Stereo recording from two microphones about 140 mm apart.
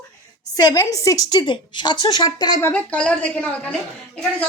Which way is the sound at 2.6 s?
10° left (ahead or behind).